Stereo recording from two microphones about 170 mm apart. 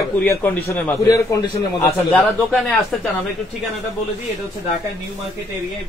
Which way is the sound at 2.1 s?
5° left (ahead or behind).